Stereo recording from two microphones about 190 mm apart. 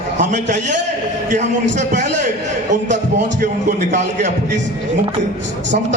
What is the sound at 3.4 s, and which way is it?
A man's voice, 40° right (ahead or behind).